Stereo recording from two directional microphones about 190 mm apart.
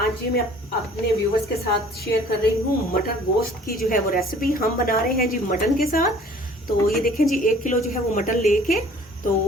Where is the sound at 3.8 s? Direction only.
50° left (ahead or behind).